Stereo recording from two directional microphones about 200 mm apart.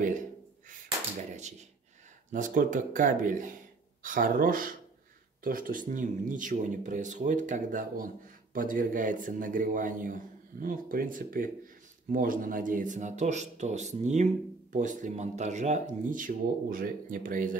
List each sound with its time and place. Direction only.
2.3 s a man's voice: 40° right (ahead or behind)